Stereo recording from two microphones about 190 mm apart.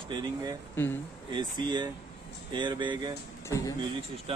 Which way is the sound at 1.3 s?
25° right (ahead or behind).